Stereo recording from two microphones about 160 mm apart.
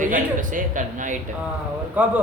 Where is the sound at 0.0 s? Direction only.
55° right (ahead or behind).